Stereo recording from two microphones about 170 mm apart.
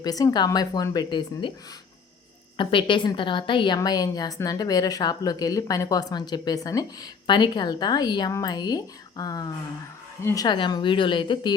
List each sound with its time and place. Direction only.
0.0 s speech: 20° left (ahead or behind)
2.6 s speech: 30° left (ahead or behind)